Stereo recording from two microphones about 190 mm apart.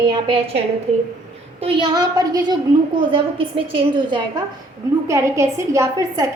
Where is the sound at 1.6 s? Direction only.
20° right (ahead or behind).